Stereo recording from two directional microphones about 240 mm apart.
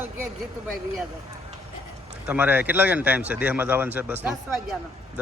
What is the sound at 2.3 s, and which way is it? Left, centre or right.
Speech, centre.